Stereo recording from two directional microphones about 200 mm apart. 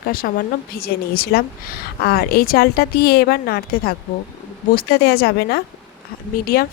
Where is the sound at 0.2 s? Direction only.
50° left (ahead or behind).